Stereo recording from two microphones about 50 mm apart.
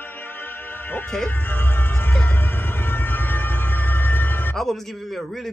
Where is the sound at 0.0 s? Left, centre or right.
Left.